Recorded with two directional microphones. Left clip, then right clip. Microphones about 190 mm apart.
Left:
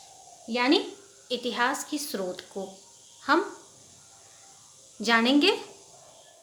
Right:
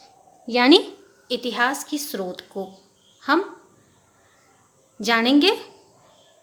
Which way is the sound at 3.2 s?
25° right (ahead or behind).